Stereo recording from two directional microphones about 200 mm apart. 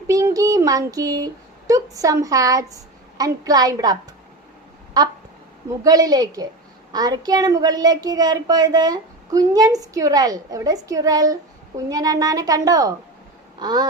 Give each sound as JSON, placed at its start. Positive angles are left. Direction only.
{"t": 0.1, "sound": "a child's voice", "side_deg": -15}
{"t": 5.8, "sound": "a child's voice", "side_deg": -20}